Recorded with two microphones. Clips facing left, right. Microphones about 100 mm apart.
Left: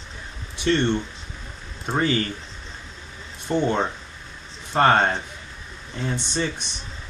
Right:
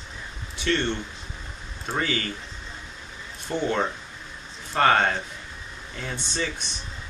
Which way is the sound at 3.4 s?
25° left (ahead or behind).